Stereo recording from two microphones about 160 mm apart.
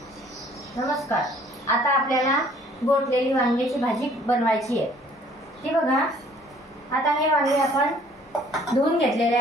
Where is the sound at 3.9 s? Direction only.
Centre (ahead or behind).